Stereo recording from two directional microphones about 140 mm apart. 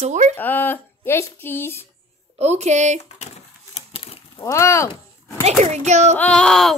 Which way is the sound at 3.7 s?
40° left (ahead or behind).